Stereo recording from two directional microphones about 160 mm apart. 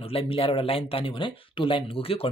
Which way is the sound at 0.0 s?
35° left (ahead or behind).